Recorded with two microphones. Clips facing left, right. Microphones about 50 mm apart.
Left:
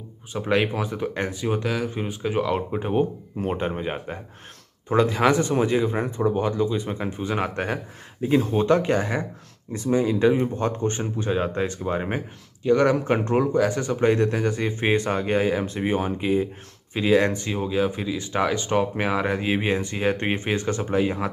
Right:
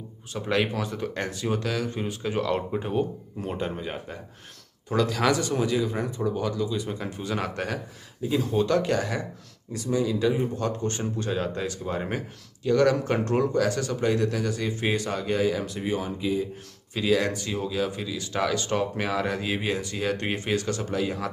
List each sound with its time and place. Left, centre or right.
0.3 s speech: centre
2.9 s speech: left
16.9 s speech: left